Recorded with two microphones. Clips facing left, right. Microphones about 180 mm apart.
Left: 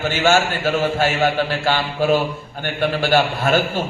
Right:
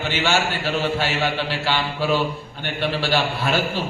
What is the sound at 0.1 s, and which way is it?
A man's voice, 45° left (ahead or behind).